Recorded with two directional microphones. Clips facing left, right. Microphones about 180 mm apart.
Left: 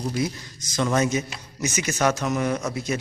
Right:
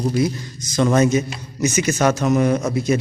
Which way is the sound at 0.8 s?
45° right (ahead or behind).